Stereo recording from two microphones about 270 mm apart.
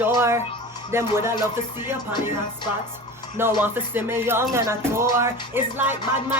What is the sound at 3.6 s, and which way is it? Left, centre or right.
Speech, centre.